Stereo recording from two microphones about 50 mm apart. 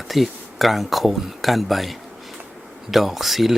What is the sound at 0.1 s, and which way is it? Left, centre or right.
A man's voice, centre.